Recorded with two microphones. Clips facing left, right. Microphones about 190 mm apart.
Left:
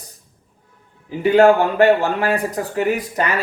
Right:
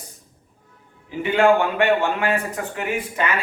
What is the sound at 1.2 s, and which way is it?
Speech, 40° left (ahead or behind).